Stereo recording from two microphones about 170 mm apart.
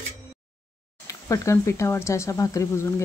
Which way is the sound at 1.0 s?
20° left (ahead or behind).